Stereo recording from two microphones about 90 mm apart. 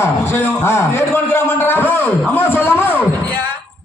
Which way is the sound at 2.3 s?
25° left (ahead or behind).